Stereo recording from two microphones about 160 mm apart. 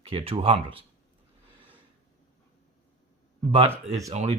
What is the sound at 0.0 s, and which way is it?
Speech, 35° right (ahead or behind).